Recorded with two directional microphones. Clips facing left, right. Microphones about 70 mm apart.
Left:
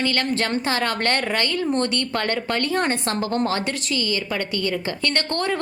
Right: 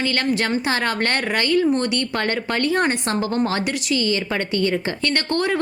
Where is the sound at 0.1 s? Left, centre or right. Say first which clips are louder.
Right 2 dB; right.